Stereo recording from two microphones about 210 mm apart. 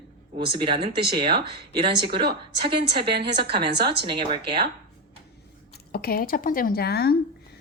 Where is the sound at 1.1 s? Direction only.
25° right (ahead or behind).